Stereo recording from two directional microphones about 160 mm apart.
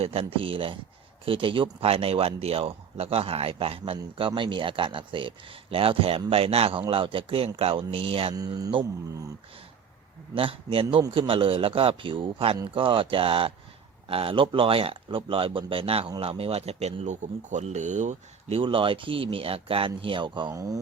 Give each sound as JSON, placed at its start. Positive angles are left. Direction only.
{"t": 0.0, "sound": "speech", "side_deg": -35}
{"t": 8.4, "sound": "mantra", "side_deg": -25}
{"t": 10.3, "sound": "speech", "side_deg": -35}